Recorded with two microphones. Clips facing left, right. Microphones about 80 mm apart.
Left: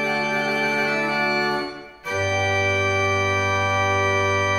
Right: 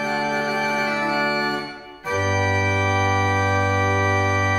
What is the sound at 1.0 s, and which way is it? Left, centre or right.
Organ, right.